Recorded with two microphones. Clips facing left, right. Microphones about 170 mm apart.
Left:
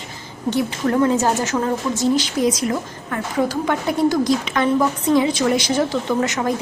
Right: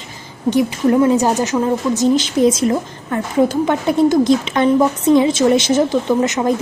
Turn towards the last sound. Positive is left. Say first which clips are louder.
# right 4 dB
turn(degrees=-20)  # may be behind; listen again after turning